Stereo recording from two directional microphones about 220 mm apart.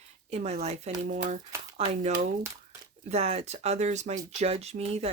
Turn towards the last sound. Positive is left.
turn(degrees=-30)  # may be behind; listen again after turning